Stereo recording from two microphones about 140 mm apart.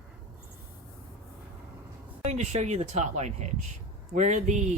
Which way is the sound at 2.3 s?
55° right (ahead or behind).